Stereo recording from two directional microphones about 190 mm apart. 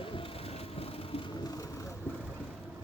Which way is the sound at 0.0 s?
25° left (ahead or behind).